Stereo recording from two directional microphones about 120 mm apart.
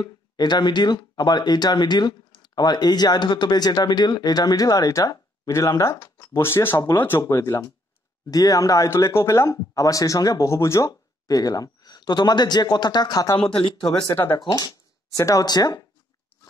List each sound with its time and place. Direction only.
0.0 s speech: 35° left (ahead or behind)
13.5 s speech: 45° left (ahead or behind)
15.1 s speech: 25° left (ahead or behind)